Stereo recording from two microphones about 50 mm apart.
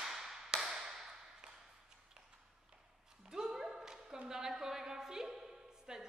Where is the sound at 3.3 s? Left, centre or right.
Centre.